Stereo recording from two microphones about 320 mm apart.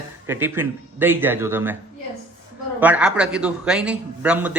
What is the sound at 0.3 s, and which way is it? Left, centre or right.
Speech, centre.